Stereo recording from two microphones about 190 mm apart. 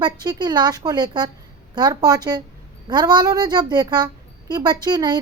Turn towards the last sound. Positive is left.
turn(degrees=-20)  # may be behind; listen again after turning